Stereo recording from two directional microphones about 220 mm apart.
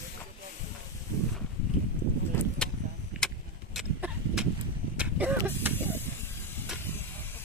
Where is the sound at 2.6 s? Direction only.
5° left (ahead or behind).